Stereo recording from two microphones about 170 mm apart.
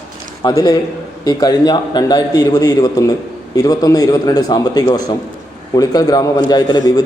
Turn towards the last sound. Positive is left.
turn(degrees=25)  # may be behind; listen again after turning